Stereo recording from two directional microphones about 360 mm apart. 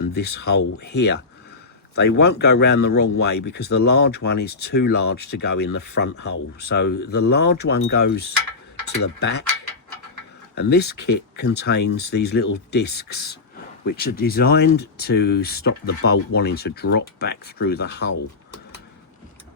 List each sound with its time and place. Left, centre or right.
0.1 s speech: left
10.5 s speech: left